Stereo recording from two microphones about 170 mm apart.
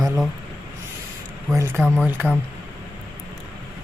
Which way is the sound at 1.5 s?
15° right (ahead or behind).